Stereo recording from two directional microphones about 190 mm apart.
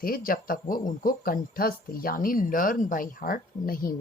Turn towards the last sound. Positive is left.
turn(degrees=50)  # may be behind; listen again after turning